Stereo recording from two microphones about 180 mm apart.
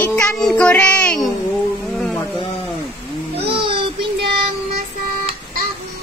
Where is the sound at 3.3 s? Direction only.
30° right (ahead or behind).